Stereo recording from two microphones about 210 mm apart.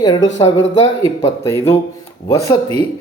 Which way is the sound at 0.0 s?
20° left (ahead or behind).